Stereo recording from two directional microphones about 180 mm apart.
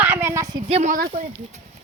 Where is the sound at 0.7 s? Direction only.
35° right (ahead or behind).